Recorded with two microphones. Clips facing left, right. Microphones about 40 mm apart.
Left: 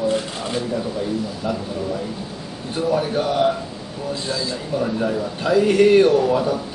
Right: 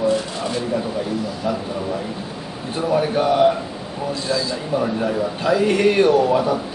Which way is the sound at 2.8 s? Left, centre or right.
Centre.